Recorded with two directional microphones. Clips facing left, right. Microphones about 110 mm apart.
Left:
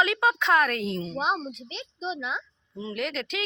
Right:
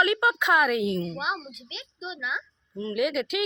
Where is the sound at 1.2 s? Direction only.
35° left (ahead or behind).